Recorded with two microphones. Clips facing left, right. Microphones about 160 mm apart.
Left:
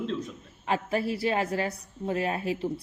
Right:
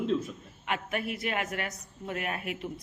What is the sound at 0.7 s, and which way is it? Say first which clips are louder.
A woman's voice: left 5 dB; 30° left (ahead or behind).